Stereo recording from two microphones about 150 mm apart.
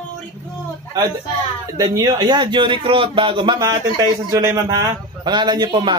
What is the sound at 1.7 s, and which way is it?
A man's voice, 25° right (ahead or behind).